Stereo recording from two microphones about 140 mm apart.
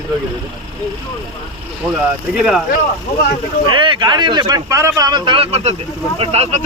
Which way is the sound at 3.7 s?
35° right (ahead or behind).